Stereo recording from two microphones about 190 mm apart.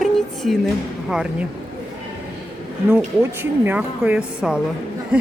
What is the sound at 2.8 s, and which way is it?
A woman's voice, 10° right (ahead or behind).